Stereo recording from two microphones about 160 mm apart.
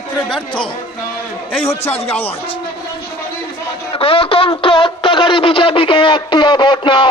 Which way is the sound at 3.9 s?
35° left (ahead or behind).